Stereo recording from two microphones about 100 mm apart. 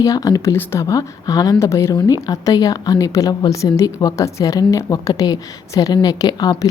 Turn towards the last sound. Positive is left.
turn(degrees=45)  # may be behind; listen again after turning